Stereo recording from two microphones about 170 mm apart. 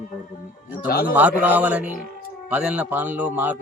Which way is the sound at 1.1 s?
10° right (ahead or behind).